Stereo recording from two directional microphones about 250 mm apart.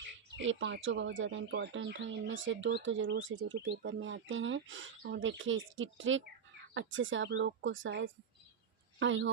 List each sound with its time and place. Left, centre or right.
0.3 s speech: right